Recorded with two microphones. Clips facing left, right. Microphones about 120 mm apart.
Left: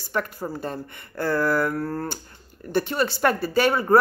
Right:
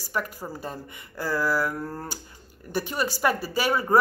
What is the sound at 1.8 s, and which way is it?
Speech, 15° right (ahead or behind).